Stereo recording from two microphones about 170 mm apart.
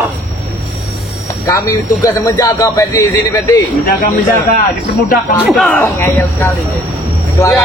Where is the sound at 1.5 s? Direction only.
20° left (ahead or behind).